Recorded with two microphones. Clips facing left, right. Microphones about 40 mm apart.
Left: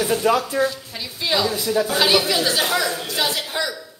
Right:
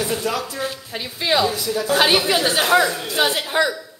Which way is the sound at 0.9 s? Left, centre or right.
Right.